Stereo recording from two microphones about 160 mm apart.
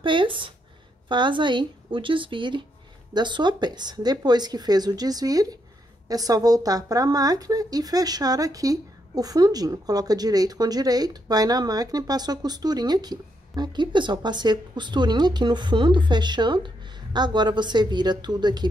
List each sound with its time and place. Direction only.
0.0 s a woman's voice: 30° right (ahead or behind)